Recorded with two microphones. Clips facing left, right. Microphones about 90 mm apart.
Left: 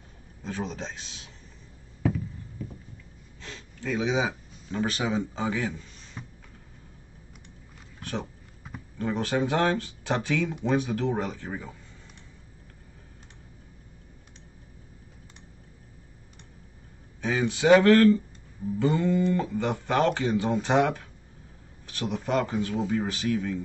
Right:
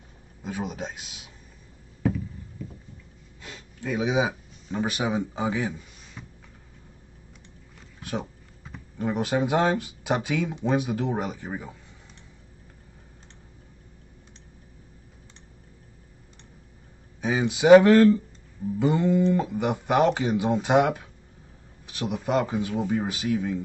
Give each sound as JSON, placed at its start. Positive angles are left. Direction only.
{"t": 0.4, "sound": "speech", "side_deg": -10}
{"t": 3.3, "sound": "speech", "side_deg": -10}
{"t": 6.2, "sound": "a sound", "side_deg": 10}
{"t": 8.0, "sound": "a sound", "side_deg": -10}
{"t": 8.9, "sound": "speech", "side_deg": -15}
{"t": 17.2, "sound": "speech", "side_deg": -15}